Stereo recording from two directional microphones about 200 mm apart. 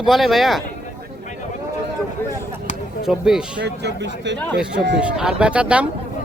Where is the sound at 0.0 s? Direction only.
Centre (ahead or behind).